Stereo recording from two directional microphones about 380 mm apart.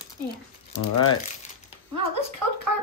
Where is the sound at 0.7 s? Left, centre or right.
Left.